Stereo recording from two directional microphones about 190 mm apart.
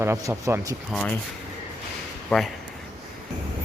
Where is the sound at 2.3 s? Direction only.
Centre (ahead or behind).